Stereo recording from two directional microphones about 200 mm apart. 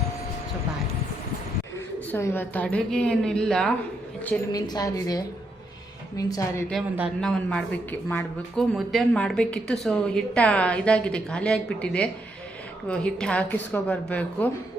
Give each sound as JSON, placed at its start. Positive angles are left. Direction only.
{"t": 2.1, "sound": "a woman's voice", "side_deg": 10}
{"t": 4.5, "sound": "a woman's voice", "side_deg": 20}
{"t": 7.2, "sound": "speech", "side_deg": 5}